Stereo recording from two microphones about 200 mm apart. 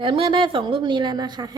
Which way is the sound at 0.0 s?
25° right (ahead or behind).